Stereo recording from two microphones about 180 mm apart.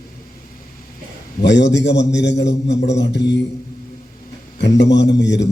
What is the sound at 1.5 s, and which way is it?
A man's voice, 75° left (ahead or behind).